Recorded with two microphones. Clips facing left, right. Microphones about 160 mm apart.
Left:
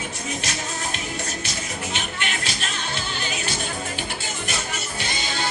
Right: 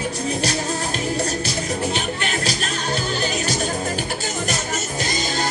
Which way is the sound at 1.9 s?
40° right (ahead or behind).